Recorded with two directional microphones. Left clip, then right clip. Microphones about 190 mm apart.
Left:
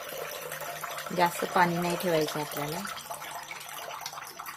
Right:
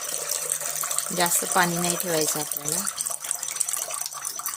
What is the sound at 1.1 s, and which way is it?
Speech, 15° right (ahead or behind).